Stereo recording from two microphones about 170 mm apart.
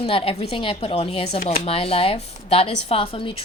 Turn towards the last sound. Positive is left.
turn(degrees=35)  # may be behind; listen again after turning